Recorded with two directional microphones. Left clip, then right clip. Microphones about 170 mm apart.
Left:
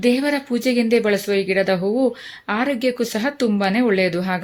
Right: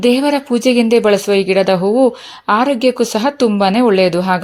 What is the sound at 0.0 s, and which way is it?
Speech, 35° right (ahead or behind).